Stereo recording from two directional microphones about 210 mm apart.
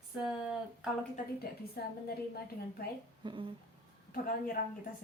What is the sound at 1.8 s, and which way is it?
Speech, 50° left (ahead or behind).